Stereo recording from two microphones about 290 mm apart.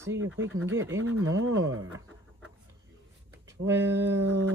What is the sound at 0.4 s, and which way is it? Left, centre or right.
Speech, right.